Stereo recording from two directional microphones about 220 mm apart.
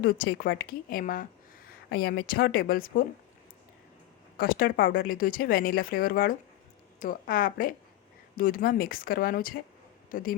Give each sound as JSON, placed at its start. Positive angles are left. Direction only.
{"t": 0.0, "sound": "speech", "side_deg": 45}
{"t": 4.4, "sound": "a man's voice", "side_deg": 40}